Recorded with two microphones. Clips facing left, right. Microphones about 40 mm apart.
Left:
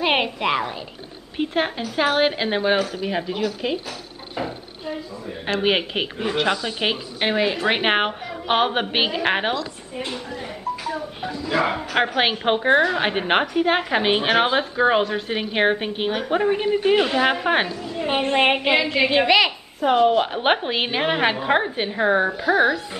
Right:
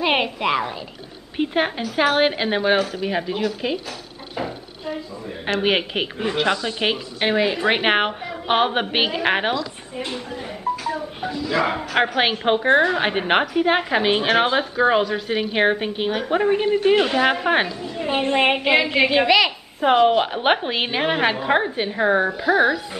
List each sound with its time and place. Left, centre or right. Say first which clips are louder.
0.0 s a woman's voice: even; centre
4.4 s a sound: even; centre
5.6 s a woman's voice: even; centre
18.8 s a woman's voice: right 2 dB; centre
19.0 s a woman's voice: left 2 dB; centre
19.8 s a woman's voice: right 1 dB; right
20.2 s a woman's voice: right 1 dB; centre